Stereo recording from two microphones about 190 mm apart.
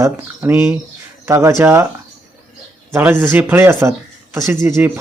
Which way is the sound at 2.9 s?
10° right (ahead or behind).